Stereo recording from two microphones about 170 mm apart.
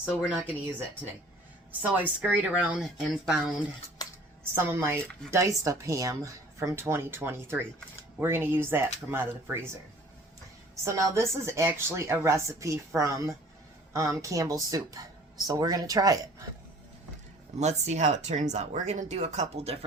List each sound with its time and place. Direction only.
0.0 s speech: 5° right (ahead or behind)
4.5 s speech: 15° right (ahead or behind)
10.8 s a woman's voice: 15° right (ahead or behind)
17.6 s speech: 40° right (ahead or behind)